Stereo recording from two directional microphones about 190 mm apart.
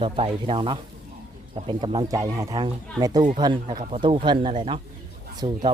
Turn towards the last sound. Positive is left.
turn(degrees=-20)  # may be behind; listen again after turning